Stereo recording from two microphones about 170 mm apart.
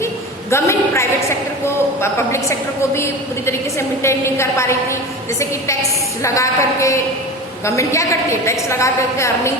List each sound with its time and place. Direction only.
0.5 s a woman's voice: 15° left (ahead or behind)
6.2 s a woman's voice: 20° left (ahead or behind)